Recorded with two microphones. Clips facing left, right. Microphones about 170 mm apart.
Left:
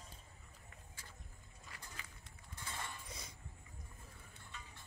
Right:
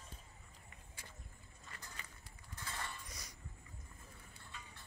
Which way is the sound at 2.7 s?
25° left (ahead or behind).